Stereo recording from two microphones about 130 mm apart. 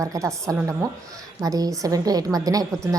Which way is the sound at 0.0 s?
25° right (ahead or behind).